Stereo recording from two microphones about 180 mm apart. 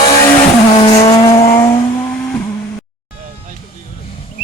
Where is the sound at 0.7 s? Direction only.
35° left (ahead or behind).